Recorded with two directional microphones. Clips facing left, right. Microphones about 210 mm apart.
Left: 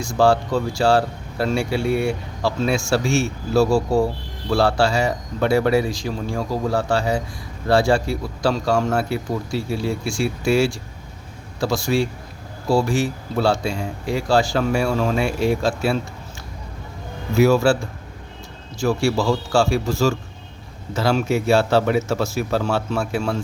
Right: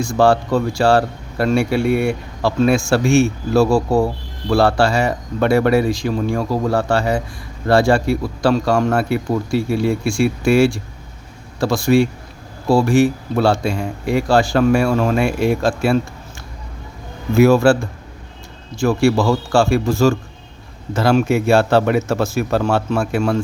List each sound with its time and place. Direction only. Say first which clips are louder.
0.0 s speech: right 3 dB; 55° right (ahead or behind)
17.3 s speech: right 4 dB; 55° right (ahead or behind)
18.8 s speech: right 5 dB; 55° right (ahead or behind)